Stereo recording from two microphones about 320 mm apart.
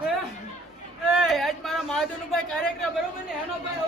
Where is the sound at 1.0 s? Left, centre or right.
Centre.